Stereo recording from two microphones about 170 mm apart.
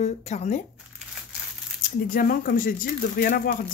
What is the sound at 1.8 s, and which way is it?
Speech, 55° left (ahead or behind).